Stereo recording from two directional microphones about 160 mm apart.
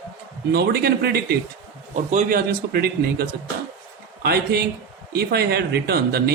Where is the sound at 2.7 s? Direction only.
75° right (ahead or behind).